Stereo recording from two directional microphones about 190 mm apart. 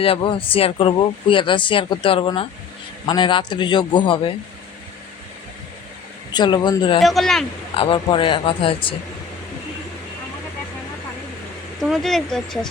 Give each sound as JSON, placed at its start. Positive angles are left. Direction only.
{"t": 0.0, "sound": "speech", "side_deg": 30}
{"t": 6.3, "sound": "speech", "side_deg": 20}
{"t": 7.0, "sound": "speech", "side_deg": 0}
{"t": 7.8, "sound": "speech", "side_deg": 25}
{"t": 11.8, "sound": "speech", "side_deg": 0}